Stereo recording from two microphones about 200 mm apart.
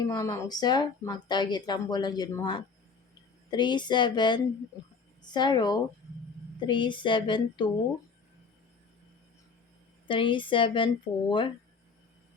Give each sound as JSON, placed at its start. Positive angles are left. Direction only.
{"t": 0.0, "sound": "speech", "side_deg": 20}
{"t": 10.1, "sound": "speech", "side_deg": 25}